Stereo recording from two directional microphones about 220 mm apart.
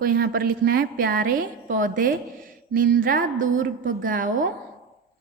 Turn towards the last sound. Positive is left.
turn(degrees=-40)  # may be behind; listen again after turning